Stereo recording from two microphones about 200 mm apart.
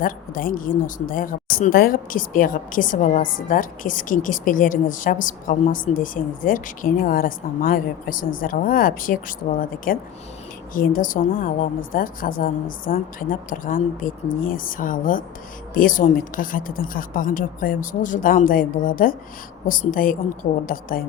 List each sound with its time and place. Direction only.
0.0 s speech: 45° left (ahead or behind)